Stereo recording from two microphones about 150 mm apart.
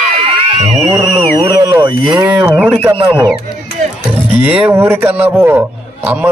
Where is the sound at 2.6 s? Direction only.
15° right (ahead or behind).